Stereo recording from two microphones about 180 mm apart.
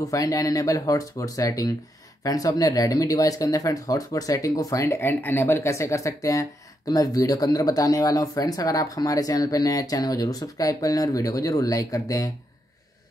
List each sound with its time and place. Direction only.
0.0 s speech: 20° left (ahead or behind)